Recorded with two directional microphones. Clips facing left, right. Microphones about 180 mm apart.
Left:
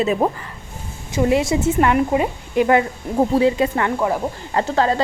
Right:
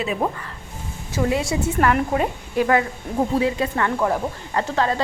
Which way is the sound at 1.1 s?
20° left (ahead or behind).